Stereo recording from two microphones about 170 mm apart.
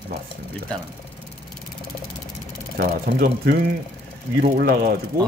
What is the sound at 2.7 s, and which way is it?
Speech, 70° right (ahead or behind).